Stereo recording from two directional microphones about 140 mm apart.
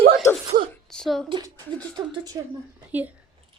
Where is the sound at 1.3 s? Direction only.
30° right (ahead or behind).